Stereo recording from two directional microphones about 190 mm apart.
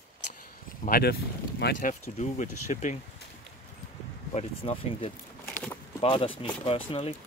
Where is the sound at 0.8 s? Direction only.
50° left (ahead or behind).